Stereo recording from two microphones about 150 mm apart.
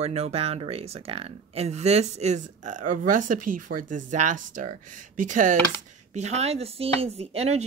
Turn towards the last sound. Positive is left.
turn(degrees=-45)  # may be behind; listen again after turning